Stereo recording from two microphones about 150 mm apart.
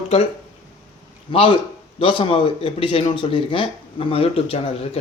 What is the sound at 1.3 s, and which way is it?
Speech, 35° left (ahead or behind).